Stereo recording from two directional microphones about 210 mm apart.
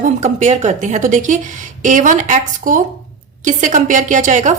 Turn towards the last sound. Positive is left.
turn(degrees=-35)  # may be behind; listen again after turning